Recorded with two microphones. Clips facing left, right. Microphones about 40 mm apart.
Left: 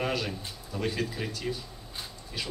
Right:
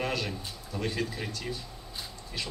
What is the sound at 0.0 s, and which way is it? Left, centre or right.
A man's voice, centre.